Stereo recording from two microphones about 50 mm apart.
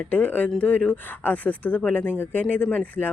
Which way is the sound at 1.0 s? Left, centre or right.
Left.